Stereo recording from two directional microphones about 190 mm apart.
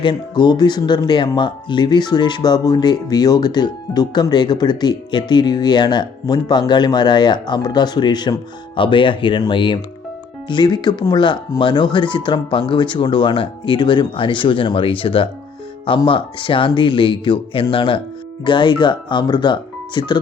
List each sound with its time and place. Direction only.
0.0 s speech: 25° left (ahead or behind)